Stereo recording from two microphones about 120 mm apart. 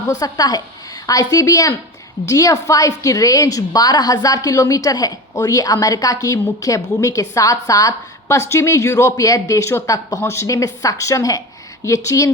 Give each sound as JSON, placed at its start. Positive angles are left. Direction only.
{"t": 0.1, "sound": "a woman's voice", "side_deg": 30}